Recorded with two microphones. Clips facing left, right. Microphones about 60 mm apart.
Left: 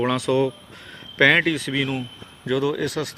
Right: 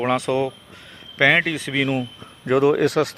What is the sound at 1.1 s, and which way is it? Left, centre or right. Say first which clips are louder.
Speech: even; centre.